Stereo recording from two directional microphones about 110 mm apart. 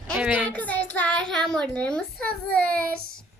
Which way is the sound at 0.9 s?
10° left (ahead or behind).